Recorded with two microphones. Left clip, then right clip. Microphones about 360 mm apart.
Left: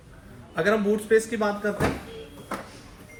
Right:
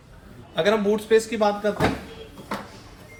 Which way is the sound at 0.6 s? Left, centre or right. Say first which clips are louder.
Right 2 dB; right.